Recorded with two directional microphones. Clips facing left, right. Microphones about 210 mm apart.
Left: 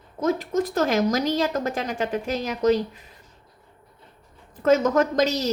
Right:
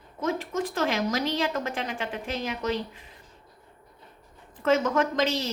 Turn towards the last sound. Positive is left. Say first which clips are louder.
# left 4 dB
turn(degrees=40)  # may be behind; listen again after turning